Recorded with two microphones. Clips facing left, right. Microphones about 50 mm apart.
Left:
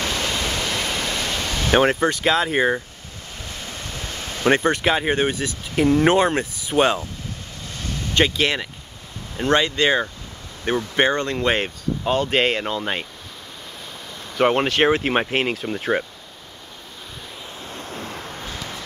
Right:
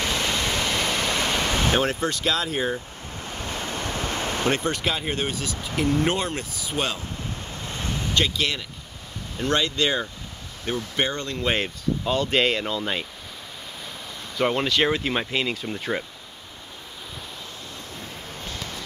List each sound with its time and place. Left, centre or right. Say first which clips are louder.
0.1 s waterfall: left 1 dB; centre
1.1 s pink noise: right 2 dB; centre
1.7 s speech: left 10 dB; left
2.0 s speech: left 5 dB; left
3.4 s waves: right 4 dB; right
4.5 s speech: left 9 dB; left
7.6 s a sound: right 1 dB; right
8.1 s speech: left 6 dB; left
9.4 s speech: left 4 dB; left
11.5 s speech: left 2 dB; left
14.4 s speech: left 4 dB; left
17.6 s waves: left 5 dB; left